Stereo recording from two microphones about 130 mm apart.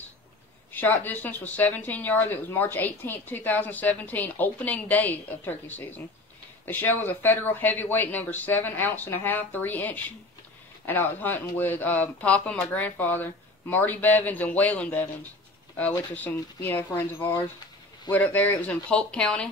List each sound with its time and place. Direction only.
0.7 s speech: 15° left (ahead or behind)
16.2 s speech: 15° left (ahead or behind)